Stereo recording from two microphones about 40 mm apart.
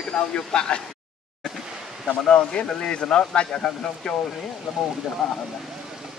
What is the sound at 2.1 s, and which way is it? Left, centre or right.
A man's voice, left.